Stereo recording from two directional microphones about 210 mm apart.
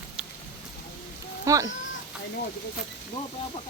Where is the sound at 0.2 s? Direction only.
5° right (ahead or behind).